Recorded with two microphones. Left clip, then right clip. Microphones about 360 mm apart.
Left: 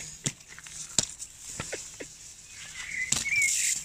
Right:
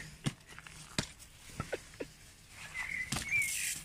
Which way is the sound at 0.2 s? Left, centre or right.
Centre.